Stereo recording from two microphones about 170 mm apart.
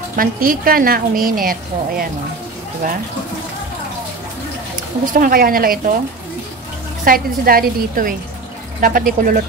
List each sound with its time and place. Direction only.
0.1 s a woman's voice: 55° right (ahead or behind)
5.0 s a woman's voice: 55° right (ahead or behind)
7.1 s a woman's voice: 60° right (ahead or behind)